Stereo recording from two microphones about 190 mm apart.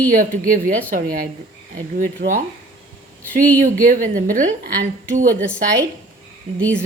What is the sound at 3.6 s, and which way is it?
A woman's voice, 45° right (ahead or behind).